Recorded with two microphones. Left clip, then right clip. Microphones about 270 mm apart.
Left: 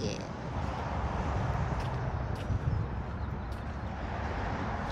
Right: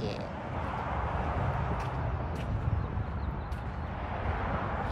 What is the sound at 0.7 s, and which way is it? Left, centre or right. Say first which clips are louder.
Vehicle: right 3 dB; right.